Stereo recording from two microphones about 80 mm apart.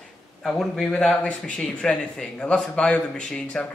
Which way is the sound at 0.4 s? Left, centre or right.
Centre.